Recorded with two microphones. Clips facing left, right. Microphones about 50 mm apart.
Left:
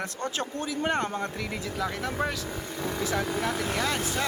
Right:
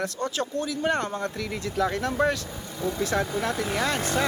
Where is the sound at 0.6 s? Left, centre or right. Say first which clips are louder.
Left 1 dB; centre.